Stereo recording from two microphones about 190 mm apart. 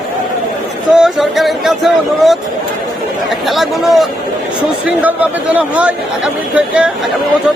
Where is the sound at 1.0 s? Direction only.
Centre (ahead or behind).